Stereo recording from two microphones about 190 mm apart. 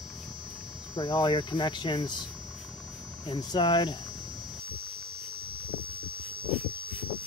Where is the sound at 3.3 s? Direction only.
25° left (ahead or behind).